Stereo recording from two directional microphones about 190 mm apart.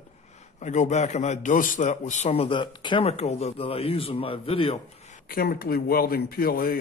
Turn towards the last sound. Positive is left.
turn(degrees=50)  # may be behind; listen again after turning